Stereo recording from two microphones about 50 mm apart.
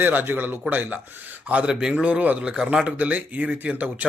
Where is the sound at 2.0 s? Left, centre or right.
Right.